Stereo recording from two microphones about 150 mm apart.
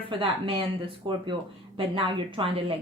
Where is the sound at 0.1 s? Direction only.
35° right (ahead or behind).